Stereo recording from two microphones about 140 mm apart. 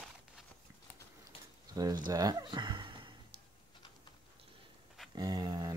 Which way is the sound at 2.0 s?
25° right (ahead or behind).